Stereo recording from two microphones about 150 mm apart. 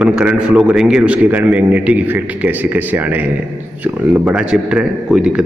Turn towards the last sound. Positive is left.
turn(degrees=-5)  # may be behind; listen again after turning